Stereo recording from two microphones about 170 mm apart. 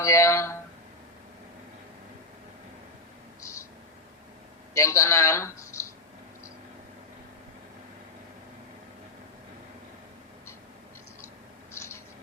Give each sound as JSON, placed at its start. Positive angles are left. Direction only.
{"t": 0.0, "sound": "speech", "side_deg": 20}
{"t": 4.7, "sound": "speech", "side_deg": 20}
{"t": 11.7, "sound": "mouse", "side_deg": 15}